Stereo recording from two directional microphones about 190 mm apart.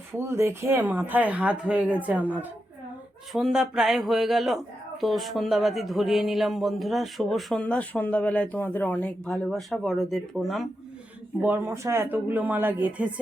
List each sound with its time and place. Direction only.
0.1 s speech: 15° right (ahead or behind)
11.3 s speech: 10° right (ahead or behind)